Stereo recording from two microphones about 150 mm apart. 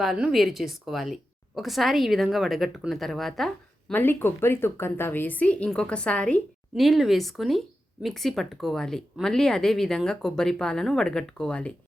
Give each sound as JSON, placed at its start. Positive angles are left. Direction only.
{"t": 0.0, "sound": "a woman's voice", "side_deg": 0}
{"t": 3.9, "sound": "a woman's voice", "side_deg": 15}